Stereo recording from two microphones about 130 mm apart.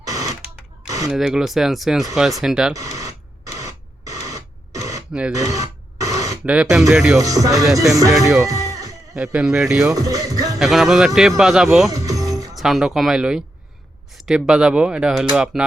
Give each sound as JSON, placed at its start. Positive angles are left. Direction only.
{"t": 0.0, "sound": "a sound", "side_deg": -25}
{"t": 1.1, "sound": "speech", "side_deg": -5}
{"t": 2.7, "sound": "radio", "side_deg": -25}
{"t": 5.4, "sound": "a sound", "side_deg": -25}
{"t": 6.4, "sound": "speech", "side_deg": -10}
{"t": 7.2, "sound": "speech", "side_deg": -25}
{"t": 8.1, "sound": "speech", "side_deg": 0}
{"t": 9.9, "sound": "speech", "side_deg": -30}
{"t": 10.6, "sound": "speech", "side_deg": 0}
{"t": 11.9, "sound": "music", "side_deg": -25}
{"t": 12.5, "sound": "speech", "side_deg": 0}